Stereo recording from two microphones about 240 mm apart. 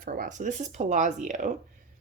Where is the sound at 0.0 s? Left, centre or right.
Right.